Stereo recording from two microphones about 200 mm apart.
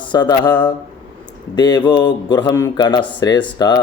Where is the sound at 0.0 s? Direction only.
20° left (ahead or behind).